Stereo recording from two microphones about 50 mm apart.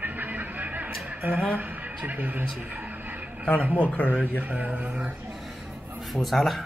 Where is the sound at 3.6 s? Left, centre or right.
Right.